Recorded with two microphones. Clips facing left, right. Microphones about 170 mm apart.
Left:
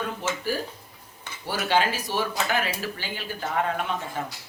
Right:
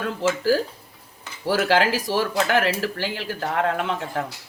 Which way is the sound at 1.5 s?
90° right.